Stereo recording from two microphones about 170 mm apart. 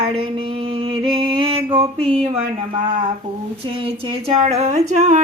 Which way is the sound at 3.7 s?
35° right (ahead or behind).